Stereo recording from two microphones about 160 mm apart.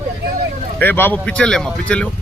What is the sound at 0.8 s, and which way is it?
Speech, 10° left (ahead or behind).